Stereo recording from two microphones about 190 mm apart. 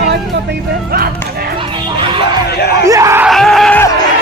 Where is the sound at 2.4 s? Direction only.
60° left (ahead or behind).